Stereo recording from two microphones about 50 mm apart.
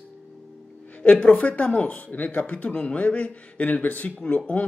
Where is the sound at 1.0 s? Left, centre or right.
Left.